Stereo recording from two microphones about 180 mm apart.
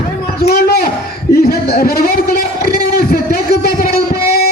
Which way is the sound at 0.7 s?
60° left (ahead or behind).